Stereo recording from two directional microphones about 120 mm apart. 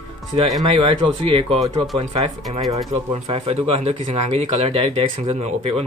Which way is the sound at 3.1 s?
65° right (ahead or behind).